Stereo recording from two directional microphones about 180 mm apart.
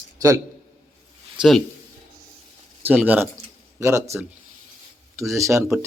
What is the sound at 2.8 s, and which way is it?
A man's voice, 10° right (ahead or behind).